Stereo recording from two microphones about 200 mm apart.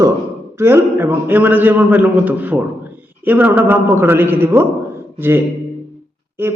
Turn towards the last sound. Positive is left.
turn(degrees=-10)  # may be behind; listen again after turning